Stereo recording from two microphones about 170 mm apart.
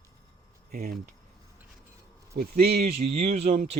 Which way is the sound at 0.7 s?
60° right (ahead or behind).